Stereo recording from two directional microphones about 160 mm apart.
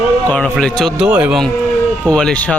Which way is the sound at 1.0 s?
5° right (ahead or behind).